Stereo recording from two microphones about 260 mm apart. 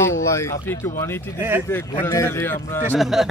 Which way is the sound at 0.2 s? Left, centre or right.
Centre.